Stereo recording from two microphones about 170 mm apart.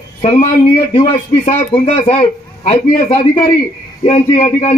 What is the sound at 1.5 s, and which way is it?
Speech, 35° left (ahead or behind).